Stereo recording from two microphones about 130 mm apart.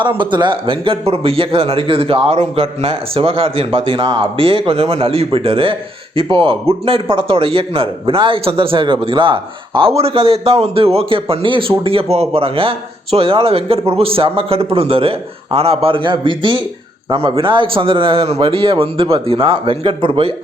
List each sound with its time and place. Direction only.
0.0 s a man's voice: 35° right (ahead or behind)